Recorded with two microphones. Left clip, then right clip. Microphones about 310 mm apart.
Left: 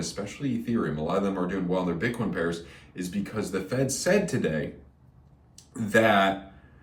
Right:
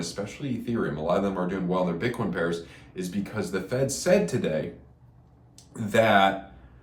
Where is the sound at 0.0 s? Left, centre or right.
Centre.